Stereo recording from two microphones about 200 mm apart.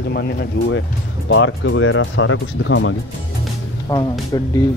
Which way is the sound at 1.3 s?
75° left (ahead or behind).